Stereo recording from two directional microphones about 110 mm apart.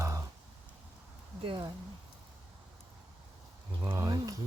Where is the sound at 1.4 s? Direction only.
50° right (ahead or behind).